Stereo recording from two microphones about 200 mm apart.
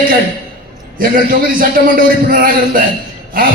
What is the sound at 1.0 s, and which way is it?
A man's voice, 45° right (ahead or behind).